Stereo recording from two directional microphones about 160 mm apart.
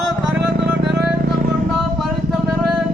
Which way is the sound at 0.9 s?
65° right (ahead or behind).